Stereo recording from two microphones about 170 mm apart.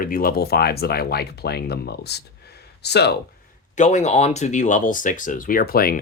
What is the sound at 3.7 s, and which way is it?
Speech, 45° left (ahead or behind).